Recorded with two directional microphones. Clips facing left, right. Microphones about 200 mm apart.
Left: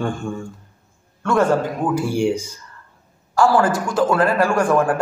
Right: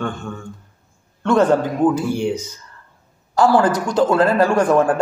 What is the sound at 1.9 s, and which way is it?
Speech, 10° left (ahead or behind).